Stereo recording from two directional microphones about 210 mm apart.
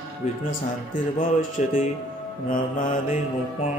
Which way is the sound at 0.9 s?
40° left (ahead or behind).